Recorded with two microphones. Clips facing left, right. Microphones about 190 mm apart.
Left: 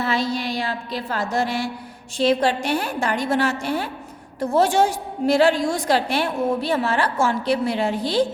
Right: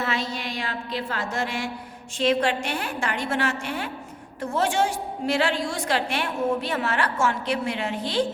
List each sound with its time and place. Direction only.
0.0 s a woman's voice: 35° left (ahead or behind)